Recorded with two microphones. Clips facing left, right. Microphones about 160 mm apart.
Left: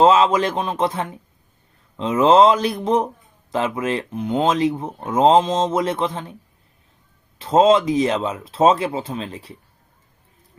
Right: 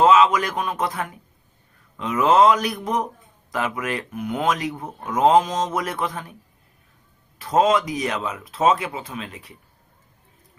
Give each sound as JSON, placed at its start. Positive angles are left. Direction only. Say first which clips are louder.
{"t": 0.0, "sound": "speech", "louder": "left 2 dB", "side_deg": 30}
{"t": 7.3, "sound": "speech", "louder": "left 4 dB", "side_deg": 25}